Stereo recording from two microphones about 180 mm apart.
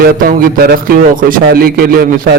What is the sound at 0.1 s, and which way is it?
A man's voice, 55° right (ahead or behind).